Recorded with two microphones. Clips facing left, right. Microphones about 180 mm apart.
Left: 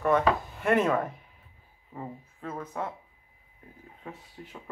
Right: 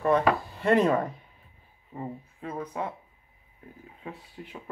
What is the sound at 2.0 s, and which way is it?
Speech, 15° right (ahead or behind).